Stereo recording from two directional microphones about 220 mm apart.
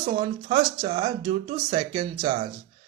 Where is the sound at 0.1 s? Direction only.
25° right (ahead or behind).